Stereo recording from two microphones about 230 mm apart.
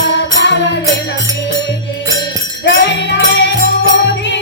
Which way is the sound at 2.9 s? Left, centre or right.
Left.